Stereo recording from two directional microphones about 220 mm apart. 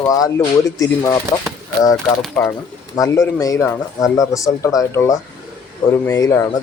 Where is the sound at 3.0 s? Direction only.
15° left (ahead or behind).